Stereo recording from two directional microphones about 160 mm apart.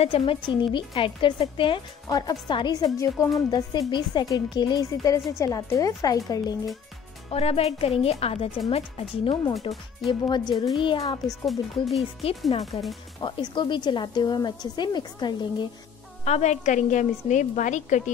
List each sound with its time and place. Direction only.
0.0 s speech: 35° left (ahead or behind)
7.2 s speech: 40° left (ahead or behind)
11.4 s speech: centre (ahead or behind)
12.4 s speech: 40° left (ahead or behind)
16.3 s a woman's voice: 45° left (ahead or behind)